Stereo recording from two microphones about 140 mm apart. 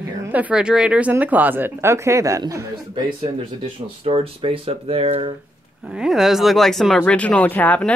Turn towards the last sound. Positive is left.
turn(degrees=10)  # may be behind; listen again after turning